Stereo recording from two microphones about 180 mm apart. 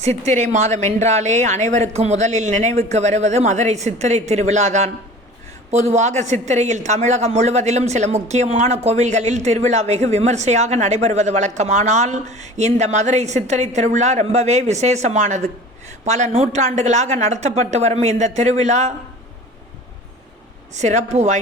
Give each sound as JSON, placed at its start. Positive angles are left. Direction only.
{"t": 0.0, "sound": "speech", "side_deg": -40}
{"t": 20.7, "sound": "speech", "side_deg": -40}